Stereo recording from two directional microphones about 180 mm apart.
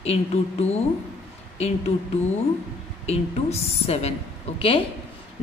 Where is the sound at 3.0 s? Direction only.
35° left (ahead or behind).